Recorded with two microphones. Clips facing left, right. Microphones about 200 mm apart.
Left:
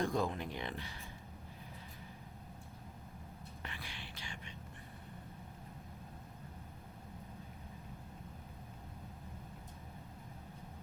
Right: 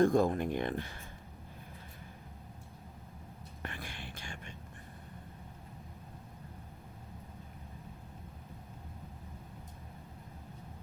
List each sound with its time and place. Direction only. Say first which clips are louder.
0.0 s speech: right 9 dB; 50° right (ahead or behind)
3.6 s whispering: right 6 dB; 50° right (ahead or behind)